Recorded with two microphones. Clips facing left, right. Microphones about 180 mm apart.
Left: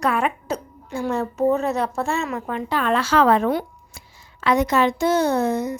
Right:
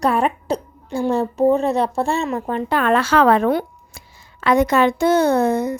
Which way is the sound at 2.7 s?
55° right (ahead or behind).